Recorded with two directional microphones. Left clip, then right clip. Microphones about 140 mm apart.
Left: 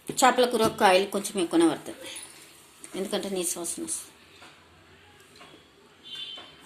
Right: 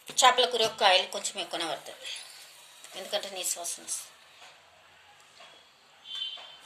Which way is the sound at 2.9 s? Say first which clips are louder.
Left 4 dB; 50° left (ahead or behind).